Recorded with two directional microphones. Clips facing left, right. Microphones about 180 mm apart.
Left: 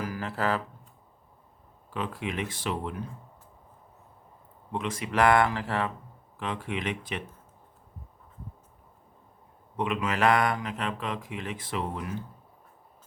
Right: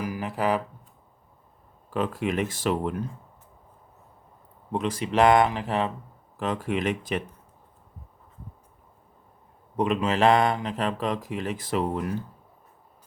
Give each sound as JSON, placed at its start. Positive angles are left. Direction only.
{"t": 0.0, "sound": "speech", "side_deg": -15}
{"t": 1.9, "sound": "speech", "side_deg": -45}
{"t": 4.7, "sound": "speech", "side_deg": -35}
{"t": 6.4, "sound": "speech", "side_deg": -40}
{"t": 9.7, "sound": "speech", "side_deg": -35}